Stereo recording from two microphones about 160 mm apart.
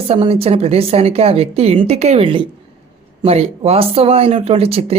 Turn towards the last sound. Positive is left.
turn(degrees=-40)  # may be behind; listen again after turning